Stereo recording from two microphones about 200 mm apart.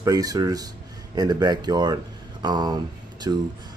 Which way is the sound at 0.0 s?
20° right (ahead or behind).